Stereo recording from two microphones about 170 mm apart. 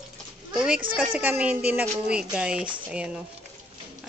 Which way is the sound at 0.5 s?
5° right (ahead or behind).